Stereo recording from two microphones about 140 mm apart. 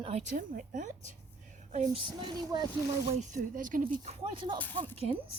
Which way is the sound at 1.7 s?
55° right (ahead or behind).